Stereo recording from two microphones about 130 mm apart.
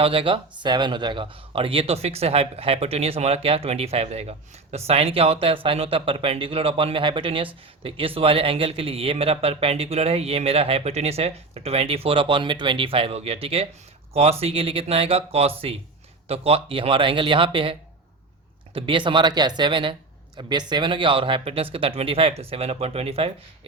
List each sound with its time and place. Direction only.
0.0 s speech: 45° right (ahead or behind)